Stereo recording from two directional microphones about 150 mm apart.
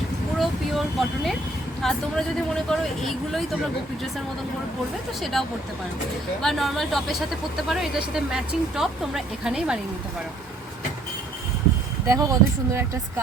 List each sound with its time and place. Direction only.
0.3 s vehicle: centre (ahead or behind)
1.8 s speech: 5° left (ahead or behind)
5.2 s speech: centre (ahead or behind)
12.0 s speech: 20° right (ahead or behind)